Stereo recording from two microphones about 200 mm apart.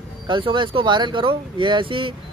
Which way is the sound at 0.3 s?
25° right (ahead or behind).